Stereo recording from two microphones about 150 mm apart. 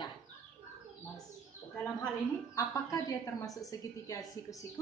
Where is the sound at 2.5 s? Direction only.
20° left (ahead or behind).